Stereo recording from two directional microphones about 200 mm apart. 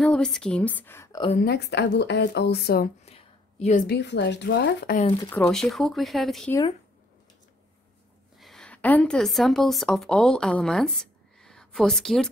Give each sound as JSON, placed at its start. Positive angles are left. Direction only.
{"t": 0.0, "sound": "a woman's voice", "side_deg": 5}
{"t": 1.4, "sound": "speech", "side_deg": 55}
{"t": 3.1, "sound": "a sound", "side_deg": 30}
{"t": 3.8, "sound": "speech", "side_deg": 60}
{"t": 5.3, "sound": "speech", "side_deg": 5}
{"t": 8.4, "sound": "a woman's voice", "side_deg": 0}